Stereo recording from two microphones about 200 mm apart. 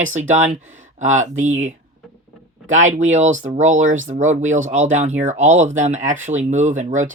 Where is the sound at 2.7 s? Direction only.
40° right (ahead or behind).